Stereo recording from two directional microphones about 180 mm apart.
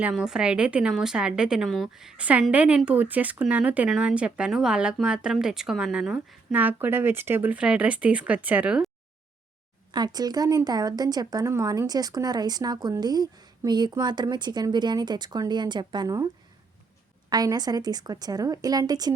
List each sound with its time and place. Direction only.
0.0 s a woman's voice: 5° right (ahead or behind)
9.9 s a woman's voice: 20° right (ahead or behind)
17.2 s a woman's voice: 20° right (ahead or behind)